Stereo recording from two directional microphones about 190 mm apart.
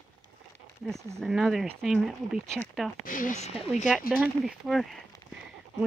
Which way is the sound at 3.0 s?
45° left (ahead or behind).